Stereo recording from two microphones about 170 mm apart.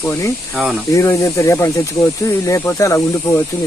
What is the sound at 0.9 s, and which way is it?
Speech, 20° left (ahead or behind).